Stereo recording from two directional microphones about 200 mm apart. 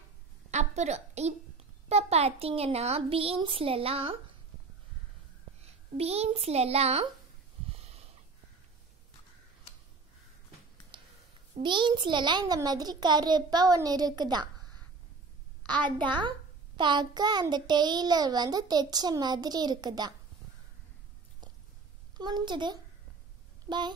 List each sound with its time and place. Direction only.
0.5 s a sound: 35° right (ahead or behind)
1.9 s a child's voice: 30° right (ahead or behind)
5.6 s a woman's voice: 30° right (ahead or behind)
7.7 s snort: 30° right (ahead or behind)
10.9 s a sound: 25° right (ahead or behind)
11.5 s a child's voice: 25° right (ahead or behind)
15.6 s a sound: 20° right (ahead or behind)
16.2 s a child's voice: 25° right (ahead or behind)
22.1 s a child's voice: 20° right (ahead or behind)